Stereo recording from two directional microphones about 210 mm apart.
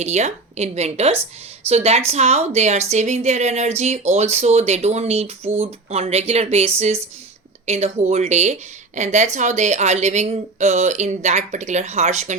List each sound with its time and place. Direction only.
0.0 s a woman's voice: 35° right (ahead or behind)